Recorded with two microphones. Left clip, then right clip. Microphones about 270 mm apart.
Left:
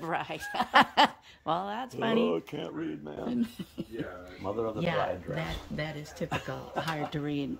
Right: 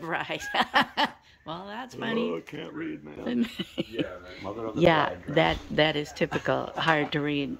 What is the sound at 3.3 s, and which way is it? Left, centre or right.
Speech, centre.